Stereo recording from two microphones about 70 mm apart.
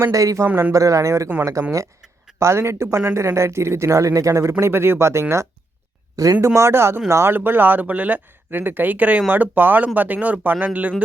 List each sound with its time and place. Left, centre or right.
0.1 s speech: right
2.4 s speech: right
4.6 s speech: right
6.4 s speech: right
7.3 s speech: right